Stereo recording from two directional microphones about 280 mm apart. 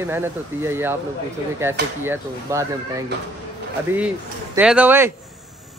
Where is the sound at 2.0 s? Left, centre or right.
Centre.